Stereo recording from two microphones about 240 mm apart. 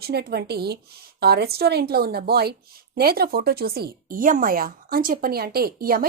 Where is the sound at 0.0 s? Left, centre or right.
Right.